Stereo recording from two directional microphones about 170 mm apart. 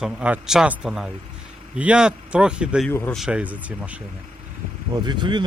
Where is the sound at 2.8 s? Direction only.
10° left (ahead or behind).